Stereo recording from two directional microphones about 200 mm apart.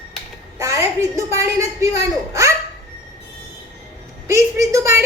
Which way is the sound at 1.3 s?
15° right (ahead or behind).